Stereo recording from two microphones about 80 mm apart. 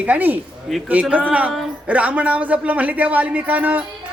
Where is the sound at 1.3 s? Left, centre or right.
Centre.